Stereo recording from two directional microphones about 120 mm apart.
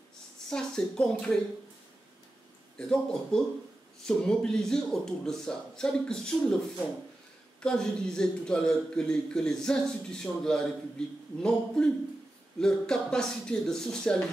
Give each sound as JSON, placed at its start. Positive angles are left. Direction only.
{"t": 0.5, "sound": "a man's voice", "side_deg": 5}
{"t": 2.8, "sound": "a man's voice", "side_deg": 5}
{"t": 7.6, "sound": "a man's voice", "side_deg": 5}